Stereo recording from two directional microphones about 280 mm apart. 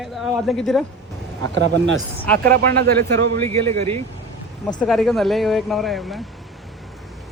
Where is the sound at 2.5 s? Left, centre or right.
Right.